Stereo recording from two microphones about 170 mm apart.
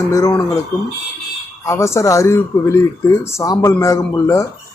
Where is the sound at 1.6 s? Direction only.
15° left (ahead or behind).